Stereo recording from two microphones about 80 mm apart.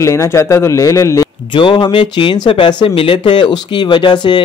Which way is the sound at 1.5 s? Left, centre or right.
Left.